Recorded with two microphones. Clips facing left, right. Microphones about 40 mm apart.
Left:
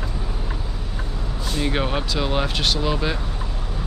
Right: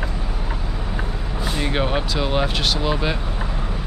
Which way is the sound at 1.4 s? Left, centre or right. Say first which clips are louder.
Right 1 dB; centre.